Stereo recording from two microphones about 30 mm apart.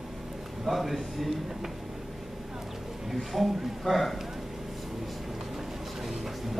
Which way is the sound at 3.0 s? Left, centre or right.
Centre.